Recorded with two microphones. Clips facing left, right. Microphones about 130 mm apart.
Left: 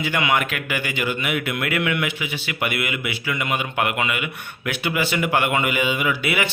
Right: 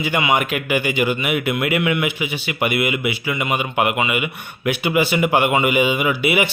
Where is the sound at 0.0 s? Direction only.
15° right (ahead or behind).